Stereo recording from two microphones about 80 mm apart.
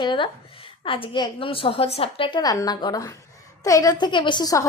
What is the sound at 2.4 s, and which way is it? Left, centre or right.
A woman's voice, left.